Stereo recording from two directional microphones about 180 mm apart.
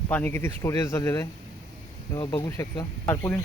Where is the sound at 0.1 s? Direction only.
10° left (ahead or behind).